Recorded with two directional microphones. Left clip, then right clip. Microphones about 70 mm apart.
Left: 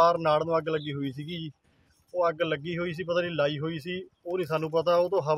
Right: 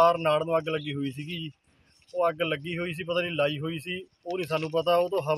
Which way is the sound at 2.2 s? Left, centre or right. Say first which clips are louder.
Right 1 dB; left.